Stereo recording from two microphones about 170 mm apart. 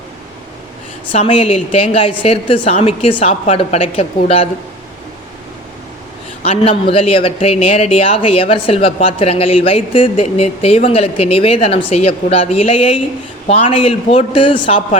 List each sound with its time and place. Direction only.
1.1 s speech: 35° left (ahead or behind)
6.4 s speech: 35° left (ahead or behind)